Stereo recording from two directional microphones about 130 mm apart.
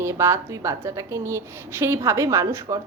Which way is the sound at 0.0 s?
20° right (ahead or behind).